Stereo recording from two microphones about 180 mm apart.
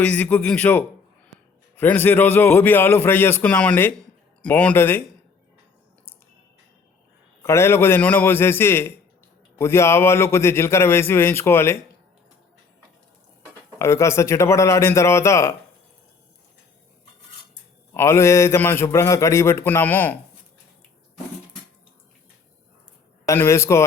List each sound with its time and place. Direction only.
0.0 s a man's voice: 10° left (ahead or behind)
7.4 s a man's voice: 15° left (ahead or behind)
13.7 s a man's voice: 15° left (ahead or behind)
17.9 s a man's voice: 15° left (ahead or behind)
23.2 s a man's voice: 15° left (ahead or behind)